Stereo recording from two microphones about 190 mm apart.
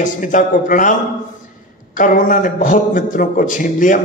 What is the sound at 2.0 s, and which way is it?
A man's voice, 45° left (ahead or behind).